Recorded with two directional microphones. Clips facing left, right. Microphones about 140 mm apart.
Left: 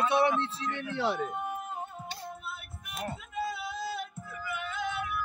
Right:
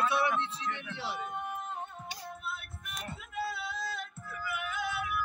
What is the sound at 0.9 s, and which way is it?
Speech, 60° left (ahead or behind).